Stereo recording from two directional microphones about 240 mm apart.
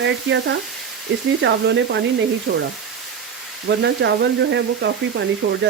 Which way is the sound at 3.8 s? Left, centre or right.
Right.